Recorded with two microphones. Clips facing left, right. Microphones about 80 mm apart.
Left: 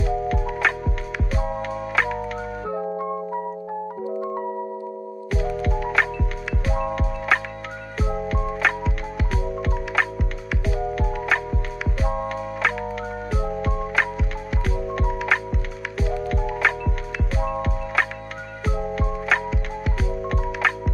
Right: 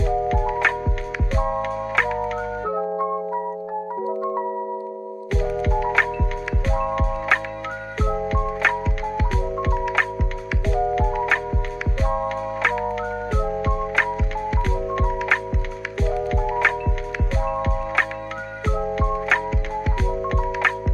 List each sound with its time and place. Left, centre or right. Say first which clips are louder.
0.0 s music: right 3 dB; centre
4.1 s music: right 3 dB; right
5.3 s music: right 2 dB; centre